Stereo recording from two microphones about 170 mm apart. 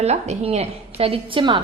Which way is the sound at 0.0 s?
40° right (ahead or behind).